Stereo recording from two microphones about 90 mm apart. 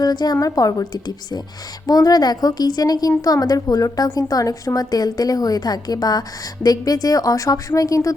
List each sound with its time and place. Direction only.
0.0 s a woman's voice: 50° left (ahead or behind)